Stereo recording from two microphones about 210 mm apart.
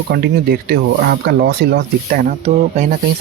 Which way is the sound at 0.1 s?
50° right (ahead or behind).